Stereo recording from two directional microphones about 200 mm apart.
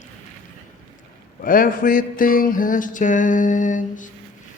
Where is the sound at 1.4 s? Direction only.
45° left (ahead or behind).